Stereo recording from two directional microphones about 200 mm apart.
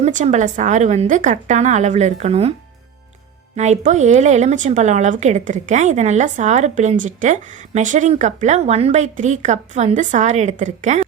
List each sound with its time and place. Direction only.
0.0 s speech: 35° right (ahead or behind)
3.5 s speech: 35° right (ahead or behind)